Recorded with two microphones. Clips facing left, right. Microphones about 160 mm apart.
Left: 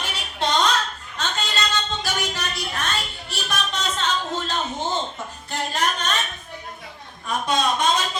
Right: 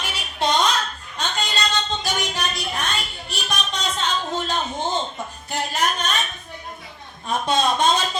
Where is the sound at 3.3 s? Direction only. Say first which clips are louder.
Right 1 dB; 15° right (ahead or behind).